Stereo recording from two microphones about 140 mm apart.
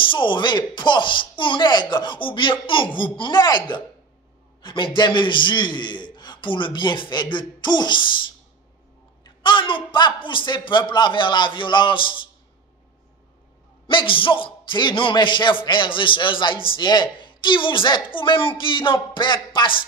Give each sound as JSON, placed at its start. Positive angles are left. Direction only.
{"t": 0.0, "sound": "speech", "side_deg": 35}
{"t": 13.8, "sound": "speech", "side_deg": 40}